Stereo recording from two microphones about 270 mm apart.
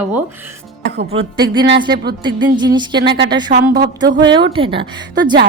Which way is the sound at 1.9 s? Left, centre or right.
Right.